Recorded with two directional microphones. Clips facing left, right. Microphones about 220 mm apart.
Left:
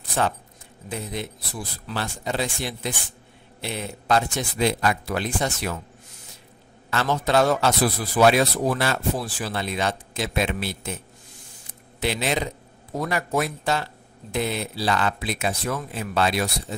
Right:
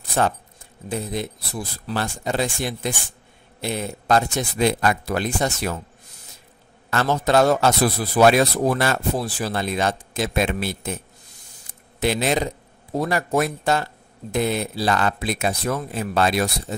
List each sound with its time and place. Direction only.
0.8 s a man's voice: 40° right (ahead or behind)
6.9 s a man's voice: 45° right (ahead or behind)
12.0 s a man's voice: 45° right (ahead or behind)